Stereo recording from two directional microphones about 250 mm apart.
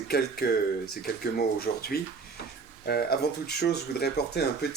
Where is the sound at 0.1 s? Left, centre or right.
Left.